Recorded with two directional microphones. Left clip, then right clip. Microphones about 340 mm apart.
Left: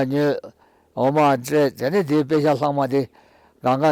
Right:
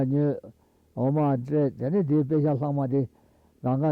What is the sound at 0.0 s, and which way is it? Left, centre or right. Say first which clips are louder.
Speech: left 6 dB; centre.